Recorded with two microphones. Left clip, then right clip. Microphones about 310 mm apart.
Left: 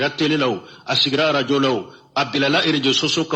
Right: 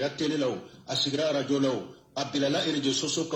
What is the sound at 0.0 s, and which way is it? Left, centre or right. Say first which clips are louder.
A man's voice: left 9 dB; left.